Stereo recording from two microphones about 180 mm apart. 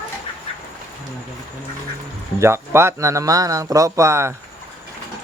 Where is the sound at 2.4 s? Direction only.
15° right (ahead or behind).